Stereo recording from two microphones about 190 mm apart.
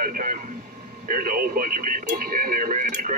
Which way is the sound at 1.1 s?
45° right (ahead or behind).